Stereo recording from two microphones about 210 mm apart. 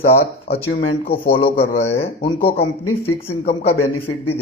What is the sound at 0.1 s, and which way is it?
A man's voice, 30° left (ahead or behind).